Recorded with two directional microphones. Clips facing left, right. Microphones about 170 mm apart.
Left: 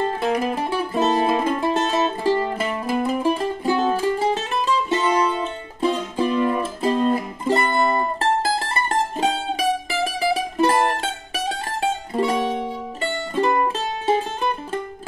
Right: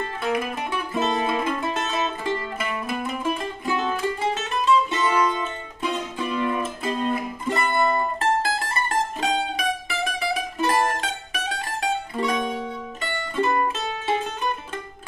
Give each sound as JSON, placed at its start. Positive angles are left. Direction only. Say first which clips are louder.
{"t": 0.2, "sound": "music", "louder": "left 4 dB", "side_deg": 35}
{"t": 8.2, "sound": "mandolin", "louder": "left 2 dB", "side_deg": 35}
{"t": 13.5, "sound": "music", "louder": "left 3 dB", "side_deg": 25}